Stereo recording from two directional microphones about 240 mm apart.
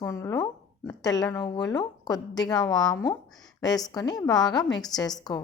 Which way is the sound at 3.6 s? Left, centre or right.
Centre.